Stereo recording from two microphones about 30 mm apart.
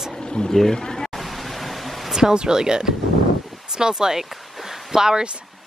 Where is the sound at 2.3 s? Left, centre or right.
Right.